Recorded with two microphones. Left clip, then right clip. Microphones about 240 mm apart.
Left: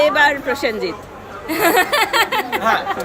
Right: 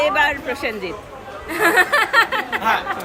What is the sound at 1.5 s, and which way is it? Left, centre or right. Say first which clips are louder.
Speech: even; left.